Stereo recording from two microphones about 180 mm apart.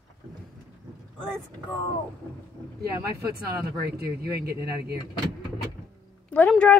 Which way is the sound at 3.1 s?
60° right (ahead or behind).